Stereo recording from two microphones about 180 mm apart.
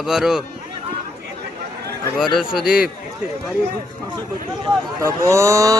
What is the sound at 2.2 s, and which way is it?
Speech, centre (ahead or behind).